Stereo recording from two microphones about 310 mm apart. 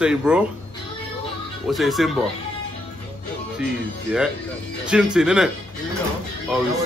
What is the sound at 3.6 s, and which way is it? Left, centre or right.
Speech, centre.